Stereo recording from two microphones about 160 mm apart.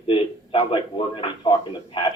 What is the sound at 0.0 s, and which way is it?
Speech, 35° left (ahead or behind).